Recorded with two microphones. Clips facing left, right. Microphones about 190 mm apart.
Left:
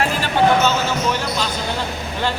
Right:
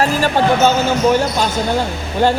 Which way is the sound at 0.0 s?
45° right (ahead or behind).